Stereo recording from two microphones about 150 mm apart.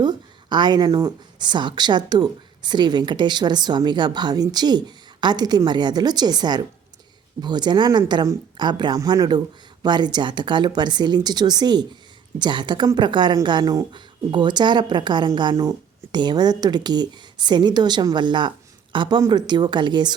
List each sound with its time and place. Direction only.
0.0 s speech: 30° right (ahead or behind)